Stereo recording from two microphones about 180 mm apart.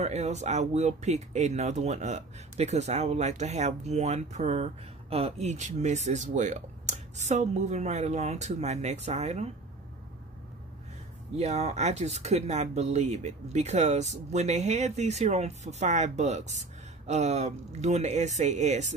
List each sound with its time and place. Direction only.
0.0 s speech: 40° right (ahead or behind)
11.3 s speech: 35° right (ahead or behind)